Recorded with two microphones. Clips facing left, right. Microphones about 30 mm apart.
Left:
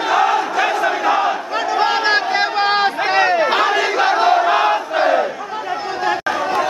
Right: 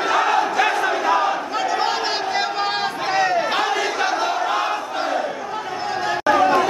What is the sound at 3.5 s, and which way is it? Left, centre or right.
Crowd, left.